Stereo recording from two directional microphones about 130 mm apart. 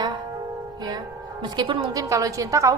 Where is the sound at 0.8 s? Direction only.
30° right (ahead or behind).